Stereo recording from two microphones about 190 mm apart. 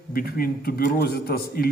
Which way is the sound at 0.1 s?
50° left (ahead or behind).